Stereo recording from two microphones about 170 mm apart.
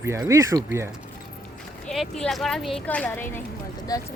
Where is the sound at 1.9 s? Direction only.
Centre (ahead or behind).